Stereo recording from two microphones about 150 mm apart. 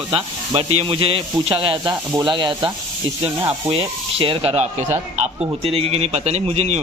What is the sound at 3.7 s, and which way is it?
A man's voice, 40° right (ahead or behind).